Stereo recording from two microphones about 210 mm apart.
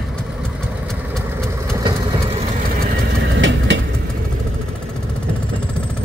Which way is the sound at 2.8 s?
60° right (ahead or behind).